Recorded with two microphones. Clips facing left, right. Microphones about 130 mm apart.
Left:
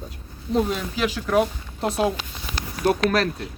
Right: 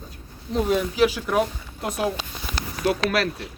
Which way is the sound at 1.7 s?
30° left (ahead or behind).